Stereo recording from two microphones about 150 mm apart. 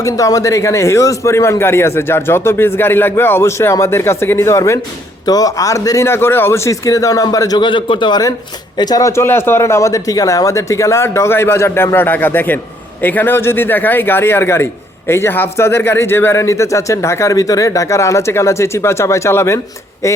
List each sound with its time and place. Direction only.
0.0 s a man's voice: 20° left (ahead or behind)